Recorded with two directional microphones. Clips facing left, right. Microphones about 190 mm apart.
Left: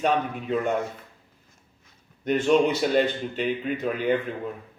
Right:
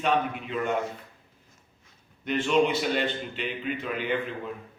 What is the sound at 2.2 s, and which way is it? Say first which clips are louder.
Speech: left 3 dB; 45° left (ahead or behind).